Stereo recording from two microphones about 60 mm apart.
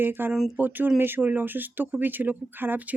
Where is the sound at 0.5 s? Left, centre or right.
Right.